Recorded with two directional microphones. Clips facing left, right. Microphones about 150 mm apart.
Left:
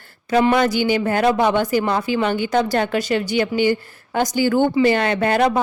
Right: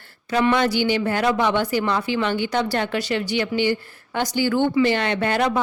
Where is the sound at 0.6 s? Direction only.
45° left (ahead or behind).